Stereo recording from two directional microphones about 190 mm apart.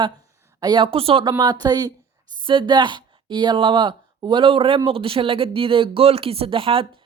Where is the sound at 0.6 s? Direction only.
25° right (ahead or behind).